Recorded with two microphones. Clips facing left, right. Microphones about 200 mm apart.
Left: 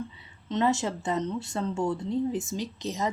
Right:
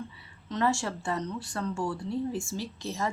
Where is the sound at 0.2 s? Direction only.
20° left (ahead or behind).